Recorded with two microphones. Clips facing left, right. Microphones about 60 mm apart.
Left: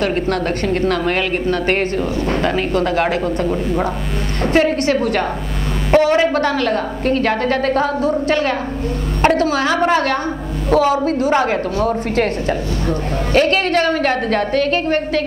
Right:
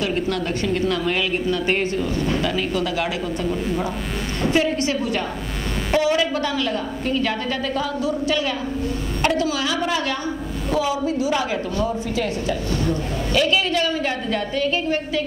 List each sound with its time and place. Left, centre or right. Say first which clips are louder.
0.0 s a woman's voice: left 5 dB; left